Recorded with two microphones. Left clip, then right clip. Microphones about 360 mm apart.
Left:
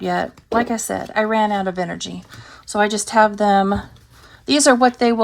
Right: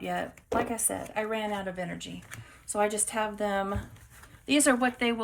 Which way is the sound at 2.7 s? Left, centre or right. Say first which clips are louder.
Left 10 dB; centre.